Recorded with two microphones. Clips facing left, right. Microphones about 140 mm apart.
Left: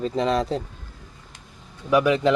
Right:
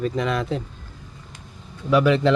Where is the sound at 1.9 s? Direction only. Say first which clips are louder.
Right 1 dB; 15° left (ahead or behind).